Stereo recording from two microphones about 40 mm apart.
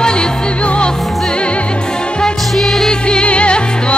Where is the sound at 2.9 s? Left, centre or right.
Left.